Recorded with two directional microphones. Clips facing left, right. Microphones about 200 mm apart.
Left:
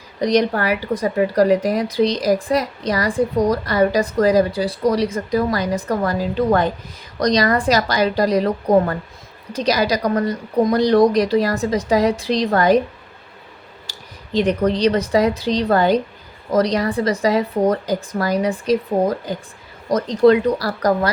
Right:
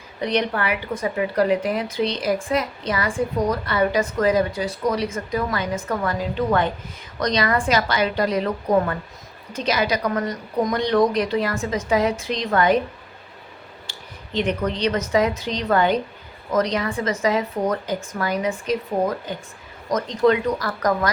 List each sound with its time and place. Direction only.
0.2 s a woman's voice: 40° left (ahead or behind)
13.9 s a sound: 40° left (ahead or behind)
14.3 s a woman's voice: 35° left (ahead or behind)